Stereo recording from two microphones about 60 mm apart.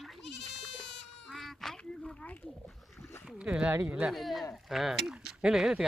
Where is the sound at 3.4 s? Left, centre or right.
Centre.